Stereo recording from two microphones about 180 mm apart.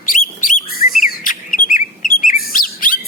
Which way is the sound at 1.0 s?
50° left (ahead or behind).